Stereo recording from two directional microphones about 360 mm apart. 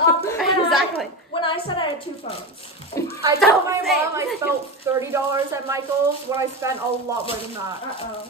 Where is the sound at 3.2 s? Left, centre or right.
Centre.